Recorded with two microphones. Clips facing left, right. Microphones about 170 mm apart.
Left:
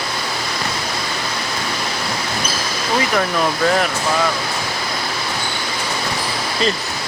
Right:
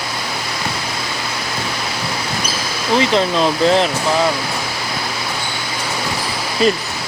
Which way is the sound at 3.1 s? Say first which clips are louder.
Right 3 dB; 25° right (ahead or behind).